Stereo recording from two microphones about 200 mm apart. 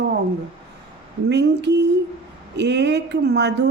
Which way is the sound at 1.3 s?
55° right (ahead or behind).